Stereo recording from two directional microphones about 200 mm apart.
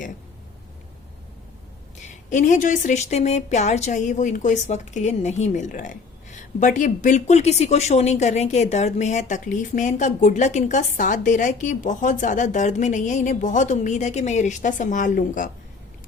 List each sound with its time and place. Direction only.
2.0 s speech: 40° left (ahead or behind)